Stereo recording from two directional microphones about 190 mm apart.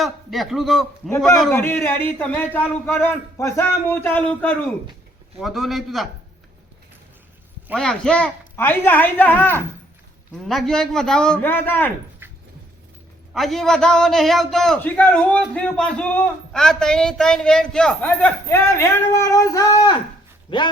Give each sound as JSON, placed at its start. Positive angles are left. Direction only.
{"t": 0.0, "sound": "a man's voice", "side_deg": 0}
{"t": 7.8, "sound": "a man's voice", "side_deg": 5}
{"t": 12.2, "sound": "dog", "side_deg": -10}
{"t": 13.3, "sound": "a man's voice", "side_deg": 0}